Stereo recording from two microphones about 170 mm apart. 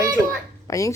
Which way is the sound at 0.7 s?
20° left (ahead or behind).